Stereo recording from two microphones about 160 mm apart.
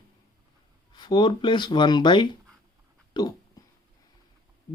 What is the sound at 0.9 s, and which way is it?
Speech, 25° left (ahead or behind).